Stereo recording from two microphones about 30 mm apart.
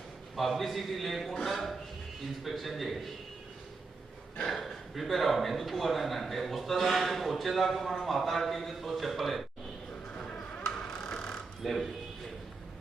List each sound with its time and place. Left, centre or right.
0.3 s a man's voice: centre
4.5 s a man's voice: centre
10.7 s a sound: centre
11.6 s a man's voice: centre